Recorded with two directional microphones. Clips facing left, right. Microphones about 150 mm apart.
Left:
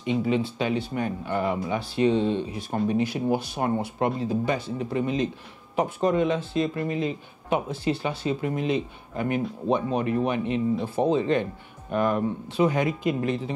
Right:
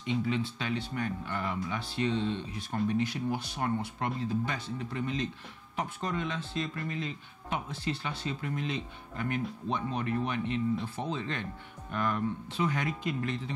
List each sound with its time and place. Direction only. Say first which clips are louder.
0.0 s speech: left 7 dB; 15° left (ahead or behind)